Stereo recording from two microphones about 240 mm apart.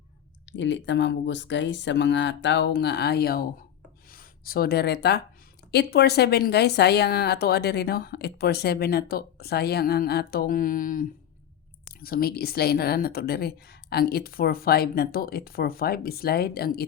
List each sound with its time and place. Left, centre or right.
0.5 s speech: left